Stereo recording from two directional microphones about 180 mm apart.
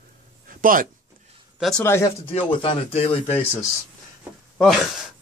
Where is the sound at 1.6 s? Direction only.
5° left (ahead or behind).